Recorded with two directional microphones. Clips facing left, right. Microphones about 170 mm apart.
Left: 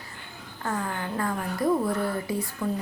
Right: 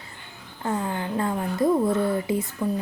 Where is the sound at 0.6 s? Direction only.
20° right (ahead or behind).